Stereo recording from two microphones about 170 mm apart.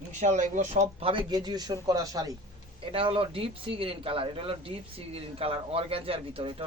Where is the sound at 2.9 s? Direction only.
35° right (ahead or behind).